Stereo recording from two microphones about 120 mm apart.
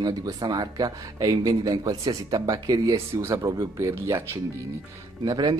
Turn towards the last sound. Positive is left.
turn(degrees=-35)  # may be behind; listen again after turning